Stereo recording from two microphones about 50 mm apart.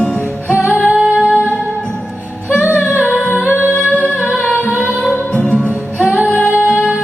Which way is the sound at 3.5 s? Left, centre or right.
Right.